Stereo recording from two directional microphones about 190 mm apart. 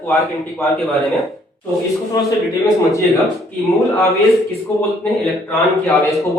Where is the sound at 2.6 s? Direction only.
15° left (ahead or behind).